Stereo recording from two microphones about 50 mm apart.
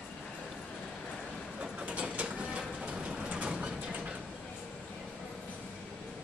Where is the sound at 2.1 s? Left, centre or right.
Right.